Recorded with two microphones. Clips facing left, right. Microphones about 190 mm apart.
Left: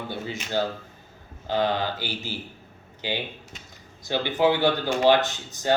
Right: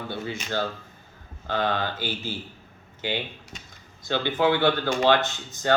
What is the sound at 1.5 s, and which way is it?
Speech, 15° left (ahead or behind).